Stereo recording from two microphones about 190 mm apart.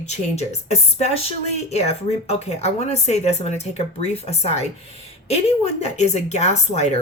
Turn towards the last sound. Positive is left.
turn(degrees=35)  # may be behind; listen again after turning